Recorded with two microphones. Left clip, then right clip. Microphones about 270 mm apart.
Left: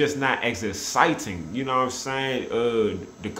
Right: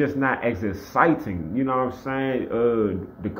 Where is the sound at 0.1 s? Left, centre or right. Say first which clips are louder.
Right 1 dB; centre.